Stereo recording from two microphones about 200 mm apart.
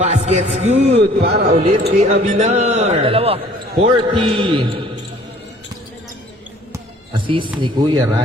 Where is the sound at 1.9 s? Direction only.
35° right (ahead or behind).